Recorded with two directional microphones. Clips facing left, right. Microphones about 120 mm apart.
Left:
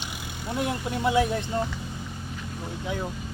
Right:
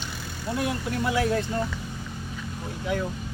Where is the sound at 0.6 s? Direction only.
20° left (ahead or behind).